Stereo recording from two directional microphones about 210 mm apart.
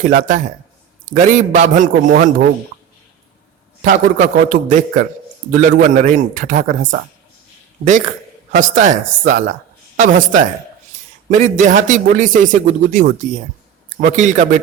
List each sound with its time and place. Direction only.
0.0 s a man's voice: 40° right (ahead or behind)
3.8 s a man's voice: 40° right (ahead or behind)
8.5 s a man's voice: 35° right (ahead or behind)